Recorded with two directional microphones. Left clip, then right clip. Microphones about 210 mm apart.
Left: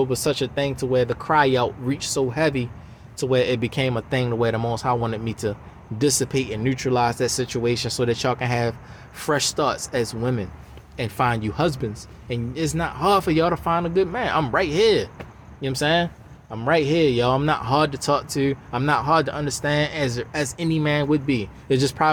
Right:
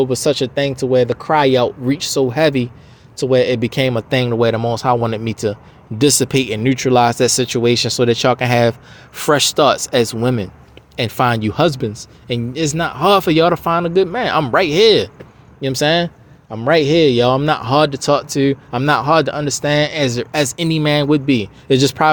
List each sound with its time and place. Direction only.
0.0 s speech: 30° right (ahead or behind)